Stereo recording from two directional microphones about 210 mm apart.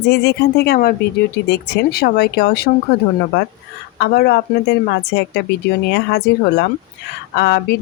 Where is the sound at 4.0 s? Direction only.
50° left (ahead or behind).